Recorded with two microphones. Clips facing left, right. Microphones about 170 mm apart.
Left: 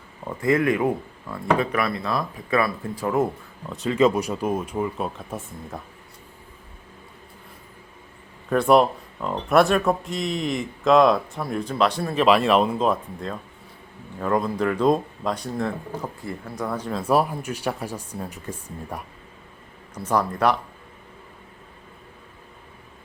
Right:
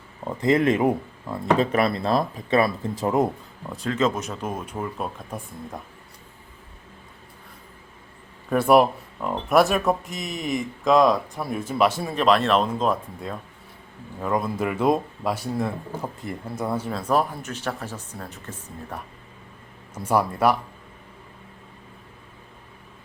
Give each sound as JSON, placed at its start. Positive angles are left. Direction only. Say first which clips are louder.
{"t": 0.3, "sound": "speech", "louder": "right 1 dB", "side_deg": -20}
{"t": 3.7, "sound": "speech", "louder": "left 4 dB", "side_deg": 0}
{"t": 8.4, "sound": "speech", "louder": "even", "side_deg": -5}
{"t": 17.0, "sound": "speech", "louder": "left 3 dB", "side_deg": 10}
{"t": 19.9, "sound": "speech", "louder": "right 1 dB", "side_deg": -10}